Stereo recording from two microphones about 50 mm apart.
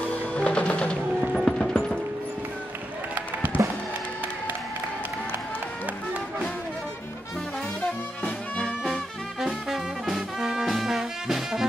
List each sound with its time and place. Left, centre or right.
0.3 s music: left
1.3 s a sound: centre
3.2 s music: right
8.8 s music: centre